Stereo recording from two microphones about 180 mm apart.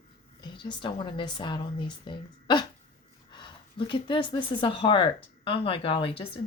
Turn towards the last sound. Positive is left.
turn(degrees=30)  # may be behind; listen again after turning